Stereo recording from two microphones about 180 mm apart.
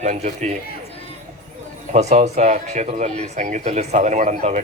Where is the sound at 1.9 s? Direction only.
40° right (ahead or behind).